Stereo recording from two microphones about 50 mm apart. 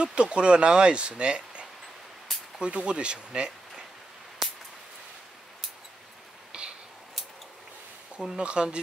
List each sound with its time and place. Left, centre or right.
0.0 s speech: centre
6.5 s a sound: centre
8.4 s speech: centre